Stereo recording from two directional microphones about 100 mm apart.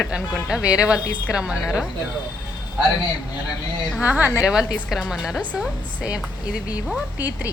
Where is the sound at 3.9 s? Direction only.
15° right (ahead or behind).